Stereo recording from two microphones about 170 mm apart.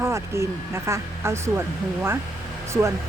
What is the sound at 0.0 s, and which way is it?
Speech, 15° right (ahead or behind).